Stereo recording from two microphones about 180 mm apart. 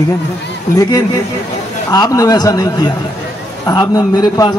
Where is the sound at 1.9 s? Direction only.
20° left (ahead or behind).